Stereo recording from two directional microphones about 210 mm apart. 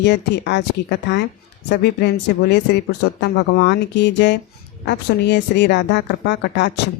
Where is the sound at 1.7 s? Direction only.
50° left (ahead or behind).